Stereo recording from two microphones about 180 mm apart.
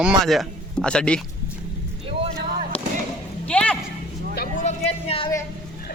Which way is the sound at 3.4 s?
5° left (ahead or behind).